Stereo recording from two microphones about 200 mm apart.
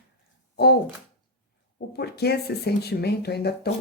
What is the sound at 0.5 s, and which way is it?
Speech, 55° left (ahead or behind).